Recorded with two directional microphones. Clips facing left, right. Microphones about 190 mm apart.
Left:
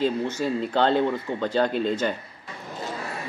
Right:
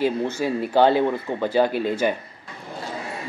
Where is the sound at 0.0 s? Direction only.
10° right (ahead or behind).